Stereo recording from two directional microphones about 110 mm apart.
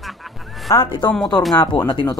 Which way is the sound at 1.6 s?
45° left (ahead or behind).